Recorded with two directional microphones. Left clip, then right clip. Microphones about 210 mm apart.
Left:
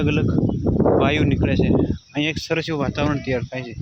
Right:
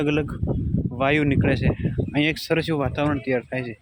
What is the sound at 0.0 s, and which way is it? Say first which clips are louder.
Speech: left 3 dB; 10° right (ahead or behind).